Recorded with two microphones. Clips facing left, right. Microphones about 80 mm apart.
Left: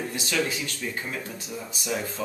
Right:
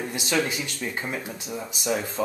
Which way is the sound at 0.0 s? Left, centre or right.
Centre.